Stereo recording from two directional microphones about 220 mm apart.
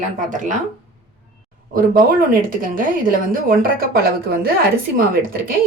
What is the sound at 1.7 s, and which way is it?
A woman's voice, 40° right (ahead or behind).